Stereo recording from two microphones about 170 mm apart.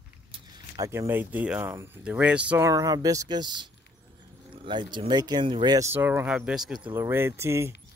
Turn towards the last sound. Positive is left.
turn(degrees=-15)  # may be behind; listen again after turning